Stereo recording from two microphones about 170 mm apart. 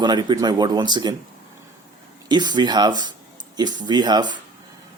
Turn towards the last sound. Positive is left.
turn(degrees=-25)  # may be behind; listen again after turning